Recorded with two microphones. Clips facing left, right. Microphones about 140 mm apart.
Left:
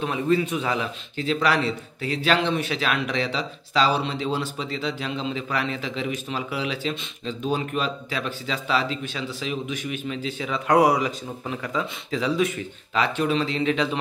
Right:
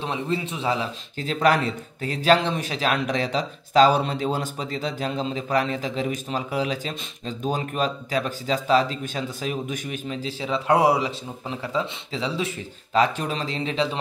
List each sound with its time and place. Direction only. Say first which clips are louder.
0.0 s speech: left 4 dB; 25° right (ahead or behind)